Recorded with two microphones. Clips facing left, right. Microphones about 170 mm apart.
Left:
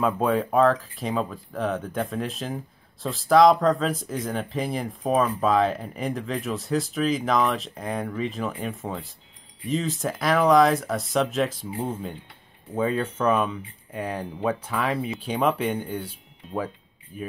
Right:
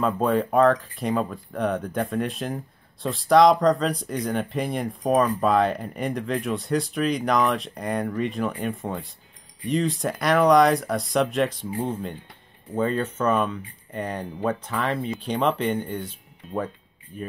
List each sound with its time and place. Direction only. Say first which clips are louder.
0.0 s speech: right 1 dB; 5° left (ahead or behind)
17.1 s speech: even; 5° left (ahead or behind)